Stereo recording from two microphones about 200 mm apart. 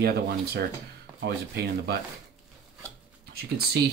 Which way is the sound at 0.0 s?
50° right (ahead or behind).